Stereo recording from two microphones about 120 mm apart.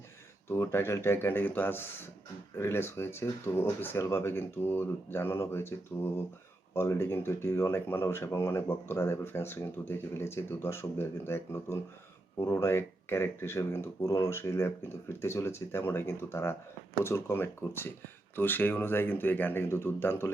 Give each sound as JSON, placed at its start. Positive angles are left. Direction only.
{"t": 0.4, "sound": "speech", "side_deg": 20}